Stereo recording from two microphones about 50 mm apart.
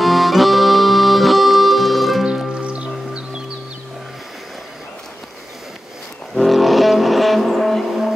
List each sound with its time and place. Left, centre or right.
0.0 s accordion: centre
2.5 s music: right
6.3 s vehicle: centre